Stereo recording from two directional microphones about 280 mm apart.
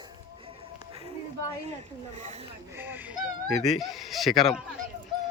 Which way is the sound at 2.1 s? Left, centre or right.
Right.